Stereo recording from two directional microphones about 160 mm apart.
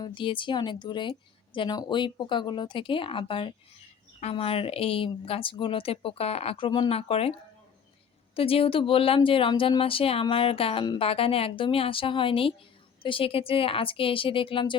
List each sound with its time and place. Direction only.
0.0 s speech: 30° left (ahead or behind)
8.4 s speech: 35° left (ahead or behind)